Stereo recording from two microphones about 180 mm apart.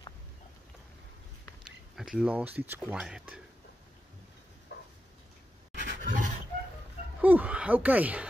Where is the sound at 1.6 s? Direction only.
5° right (ahead or behind).